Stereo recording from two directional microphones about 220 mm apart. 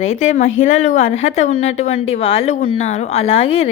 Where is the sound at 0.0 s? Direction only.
30° left (ahead or behind).